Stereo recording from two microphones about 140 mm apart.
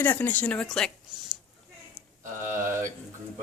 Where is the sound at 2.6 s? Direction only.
20° right (ahead or behind).